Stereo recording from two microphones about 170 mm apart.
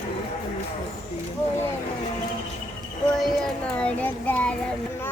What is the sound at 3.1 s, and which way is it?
Child singing, 5° left (ahead or behind).